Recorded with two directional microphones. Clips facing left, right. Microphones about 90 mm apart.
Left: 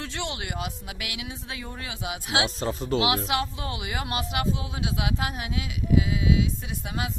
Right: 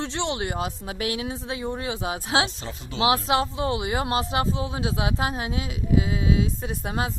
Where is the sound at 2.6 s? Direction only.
40° left (ahead or behind).